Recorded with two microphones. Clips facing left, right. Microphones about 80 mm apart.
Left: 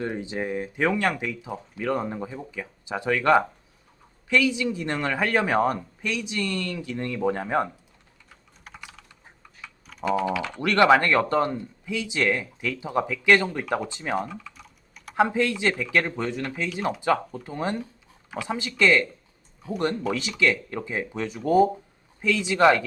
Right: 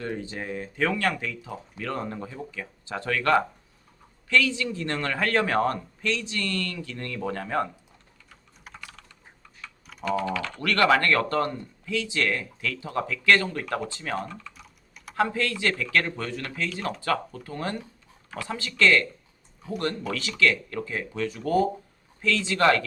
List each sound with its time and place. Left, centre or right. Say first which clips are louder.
0.0 s speech: left 4 dB; centre
8.7 s typing: even; centre
10.0 s speech: left 3 dB; centre
14.3 s typing: left 2 dB; centre
15.1 s speech: left 4 dB; centre